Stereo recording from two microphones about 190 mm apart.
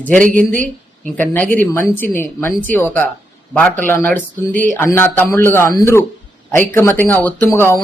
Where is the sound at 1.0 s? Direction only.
10° left (ahead or behind).